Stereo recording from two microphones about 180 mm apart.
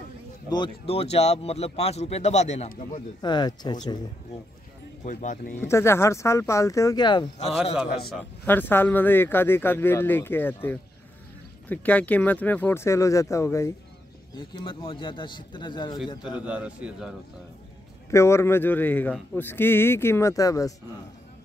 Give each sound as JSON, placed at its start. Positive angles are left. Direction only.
{"t": 0.5, "sound": "speech", "side_deg": 30}
{"t": 3.2, "sound": "speech", "side_deg": 25}
{"t": 5.0, "sound": "speech", "side_deg": 45}
{"t": 5.7, "sound": "speech", "side_deg": 15}
{"t": 8.1, "sound": "speech", "side_deg": 10}
{"t": 14.3, "sound": "speech", "side_deg": 25}
{"t": 16.4, "sound": "a man's voice", "side_deg": -5}
{"t": 18.1, "sound": "speech", "side_deg": 15}